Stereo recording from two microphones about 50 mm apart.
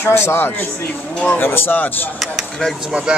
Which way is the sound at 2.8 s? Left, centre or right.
Right.